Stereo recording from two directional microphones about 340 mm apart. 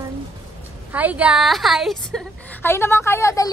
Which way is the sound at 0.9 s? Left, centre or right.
Centre.